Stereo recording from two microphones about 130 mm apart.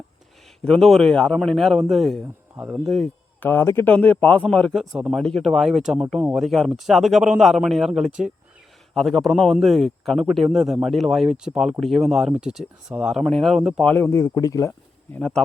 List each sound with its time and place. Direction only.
0.6 s speech: 5° left (ahead or behind)
2.2 s speech: 15° right (ahead or behind)
2.8 s speech: centre (ahead or behind)
3.4 s speech: 20° left (ahead or behind); by 13.8 s 5° right (ahead or behind)
13.8 s speech: 15° left (ahead or behind)
14.7 s speech: 10° left (ahead or behind)